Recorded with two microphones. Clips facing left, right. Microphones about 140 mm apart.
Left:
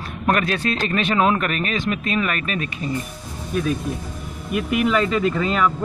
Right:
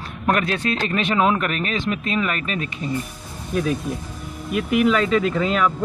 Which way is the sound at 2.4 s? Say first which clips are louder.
Left 1 dB; 70° left (ahead or behind).